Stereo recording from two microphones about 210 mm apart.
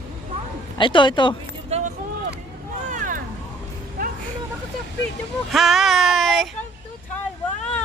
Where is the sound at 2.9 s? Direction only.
40° right (ahead or behind).